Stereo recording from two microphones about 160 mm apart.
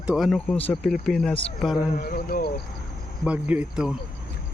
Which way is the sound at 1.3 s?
35° left (ahead or behind).